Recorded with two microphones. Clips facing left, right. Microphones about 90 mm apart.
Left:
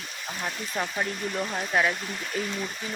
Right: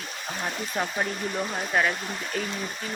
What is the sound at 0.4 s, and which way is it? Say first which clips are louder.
Speech: right 1 dB; 10° right (ahead or behind).